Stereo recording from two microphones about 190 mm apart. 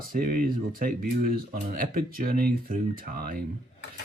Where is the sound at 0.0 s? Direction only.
50° right (ahead or behind).